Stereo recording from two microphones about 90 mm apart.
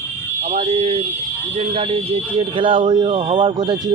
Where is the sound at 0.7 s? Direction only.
90° right.